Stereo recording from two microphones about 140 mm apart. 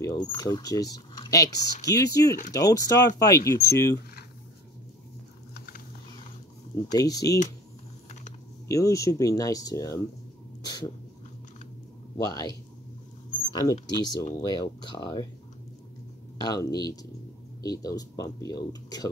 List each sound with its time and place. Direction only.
0.0 s speech: 20° left (ahead or behind)
6.7 s speech: 25° left (ahead or behind)
8.6 s speech: 25° left (ahead or behind)
12.2 s speech: 25° left (ahead or behind)
16.3 s speech: 30° left (ahead or behind)